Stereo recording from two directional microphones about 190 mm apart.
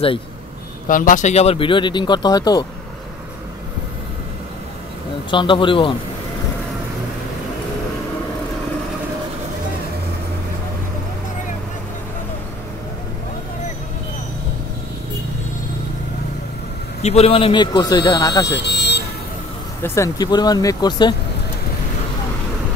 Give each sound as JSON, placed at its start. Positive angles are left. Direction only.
{"t": 0.8, "sound": "speech", "side_deg": 45}
{"t": 5.3, "sound": "speech", "side_deg": 25}
{"t": 17.0, "sound": "speech", "side_deg": 35}
{"t": 18.6, "sound": "vehicle", "side_deg": 60}
{"t": 19.8, "sound": "speech", "side_deg": 15}